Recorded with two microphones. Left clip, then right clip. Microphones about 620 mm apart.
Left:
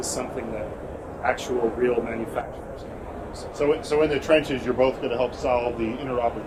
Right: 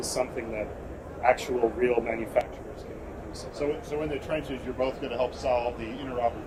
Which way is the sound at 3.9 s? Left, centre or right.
Centre.